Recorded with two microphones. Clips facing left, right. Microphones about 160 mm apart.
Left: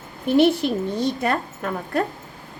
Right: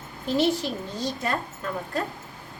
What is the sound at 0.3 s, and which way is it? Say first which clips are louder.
A woman's voice: left 7 dB; 60° left (ahead or behind).